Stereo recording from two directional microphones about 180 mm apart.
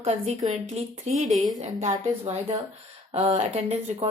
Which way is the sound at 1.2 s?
Centre (ahead or behind).